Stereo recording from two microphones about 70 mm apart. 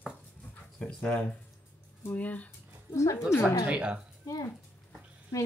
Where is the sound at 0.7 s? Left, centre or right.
Centre.